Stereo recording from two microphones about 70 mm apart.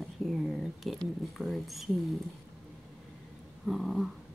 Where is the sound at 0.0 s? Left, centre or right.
Centre.